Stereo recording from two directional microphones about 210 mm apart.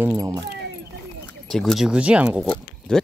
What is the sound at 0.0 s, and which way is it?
Speech, 15° right (ahead or behind).